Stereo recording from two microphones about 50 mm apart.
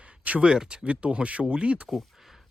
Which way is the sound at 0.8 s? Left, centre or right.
Right.